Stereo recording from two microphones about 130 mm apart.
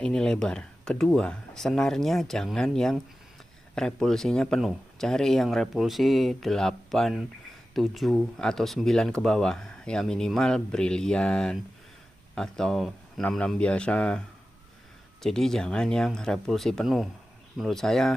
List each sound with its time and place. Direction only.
0.0 s speech: 5° left (ahead or behind)
15.2 s speech: 5° left (ahead or behind)